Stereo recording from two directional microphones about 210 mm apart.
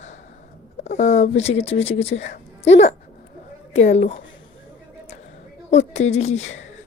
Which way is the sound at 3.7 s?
30° left (ahead or behind).